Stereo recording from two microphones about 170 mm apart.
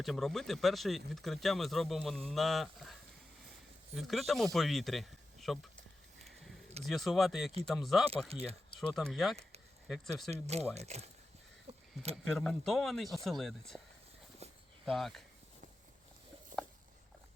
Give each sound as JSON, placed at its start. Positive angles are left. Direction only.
{"t": 0.0, "sound": "speech", "side_deg": 0}
{"t": 3.9, "sound": "speech", "side_deg": 0}
{"t": 6.8, "sound": "speech", "side_deg": 0}
{"t": 8.3, "sound": "speech", "side_deg": -35}
{"t": 8.8, "sound": "speech", "side_deg": 0}
{"t": 10.3, "sound": "speech", "side_deg": -40}
{"t": 12.1, "sound": "speech", "side_deg": 5}
{"t": 14.8, "sound": "speech", "side_deg": 0}